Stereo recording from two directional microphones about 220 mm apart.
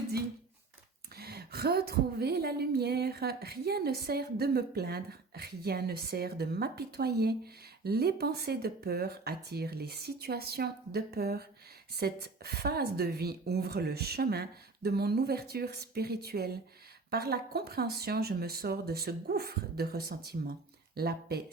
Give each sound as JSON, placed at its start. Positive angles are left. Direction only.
{"t": 1.1, "sound": "speech", "side_deg": -45}